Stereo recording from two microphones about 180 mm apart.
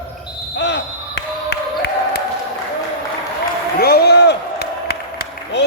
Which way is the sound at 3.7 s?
60° left (ahead or behind).